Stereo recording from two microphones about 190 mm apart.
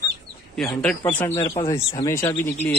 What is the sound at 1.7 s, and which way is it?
Speech, 25° left (ahead or behind).